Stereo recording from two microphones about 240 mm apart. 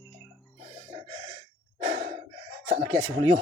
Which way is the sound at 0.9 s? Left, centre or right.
Centre.